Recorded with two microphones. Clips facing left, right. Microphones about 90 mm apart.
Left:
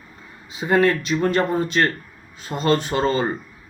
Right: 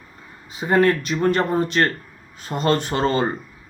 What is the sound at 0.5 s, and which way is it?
Speech, 40° right (ahead or behind).